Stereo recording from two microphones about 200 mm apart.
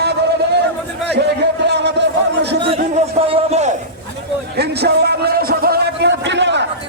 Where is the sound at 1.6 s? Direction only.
60° right (ahead or behind).